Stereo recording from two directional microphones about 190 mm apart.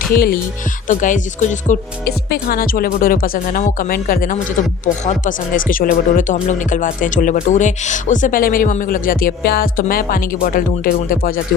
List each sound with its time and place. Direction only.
0.1 s speech: 50° left (ahead or behind)
0.9 s speech: 40° left (ahead or behind)